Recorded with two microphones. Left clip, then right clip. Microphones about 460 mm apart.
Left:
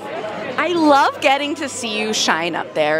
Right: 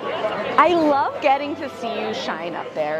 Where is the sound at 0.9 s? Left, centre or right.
Centre.